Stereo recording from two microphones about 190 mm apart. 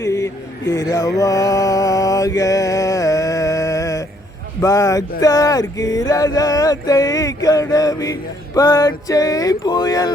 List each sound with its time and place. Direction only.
0.0 s a sound: 15° left (ahead or behind)
0.7 s mantra: 15° left (ahead or behind)
4.6 s speech: 15° left (ahead or behind)